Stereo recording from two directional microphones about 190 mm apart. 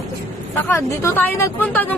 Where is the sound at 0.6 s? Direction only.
10° left (ahead or behind).